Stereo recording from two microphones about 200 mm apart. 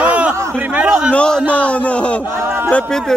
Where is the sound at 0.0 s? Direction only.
5° right (ahead or behind).